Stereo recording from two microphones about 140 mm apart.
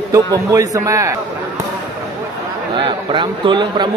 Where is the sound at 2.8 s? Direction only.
35° right (ahead or behind).